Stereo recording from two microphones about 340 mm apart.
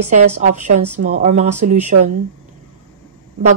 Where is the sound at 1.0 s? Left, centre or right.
Centre.